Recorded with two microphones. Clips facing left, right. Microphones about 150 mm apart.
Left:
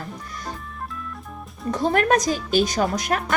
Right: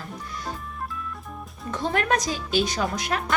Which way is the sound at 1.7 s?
40° left (ahead or behind).